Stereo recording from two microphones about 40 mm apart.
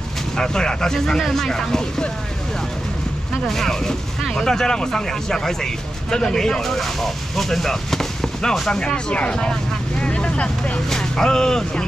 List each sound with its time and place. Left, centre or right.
0.4 s speech: centre
3.4 s speech: centre
8.7 s speech: left
9.3 s speech: centre
9.9 s vehicle: left
10.9 s speech: centre